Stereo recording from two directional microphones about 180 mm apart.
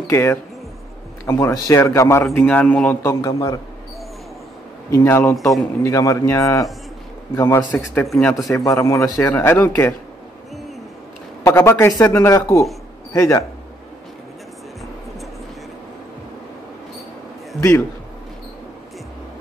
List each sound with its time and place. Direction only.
0.1 s speech: 15° left (ahead or behind)
4.9 s speech: 15° left (ahead or behind)
11.4 s speech: 15° left (ahead or behind)
17.6 s speech: 15° left (ahead or behind)